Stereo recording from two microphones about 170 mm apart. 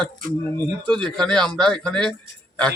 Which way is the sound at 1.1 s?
5° left (ahead or behind).